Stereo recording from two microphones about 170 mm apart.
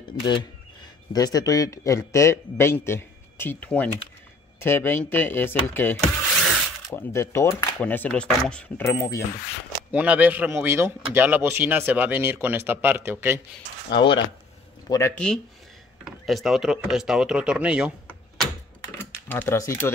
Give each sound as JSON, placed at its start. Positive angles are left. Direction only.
{"t": 0.2, "sound": "a man's voice", "side_deg": 30}
{"t": 9.8, "sound": "a man's voice", "side_deg": -10}
{"t": 13.9, "sound": "speech", "side_deg": 30}
{"t": 14.9, "sound": "a man's voice", "side_deg": 15}
{"t": 15.1, "sound": "speech", "side_deg": 5}
{"t": 18.9, "sound": "speech", "side_deg": 15}